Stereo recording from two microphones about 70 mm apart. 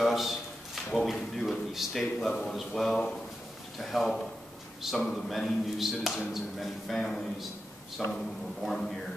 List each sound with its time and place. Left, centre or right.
0.0 s a sound: centre
0.9 s a man's voice: centre
7.0 s a man's voice: centre